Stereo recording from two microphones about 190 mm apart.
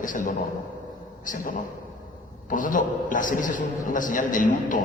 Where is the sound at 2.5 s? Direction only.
45° left (ahead or behind).